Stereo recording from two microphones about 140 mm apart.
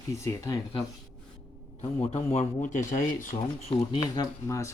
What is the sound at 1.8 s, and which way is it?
Speech, 50° left (ahead or behind).